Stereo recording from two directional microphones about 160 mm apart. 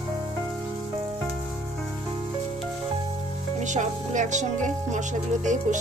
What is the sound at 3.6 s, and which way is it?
Speech, 50° right (ahead or behind).